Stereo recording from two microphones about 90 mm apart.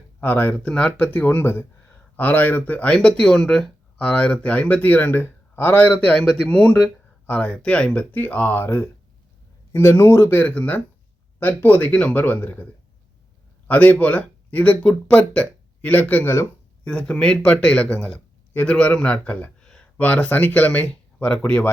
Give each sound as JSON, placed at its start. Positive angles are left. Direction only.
{"t": 0.2, "sound": "speech", "side_deg": 20}
{"t": 13.7, "sound": "a man's voice", "side_deg": 20}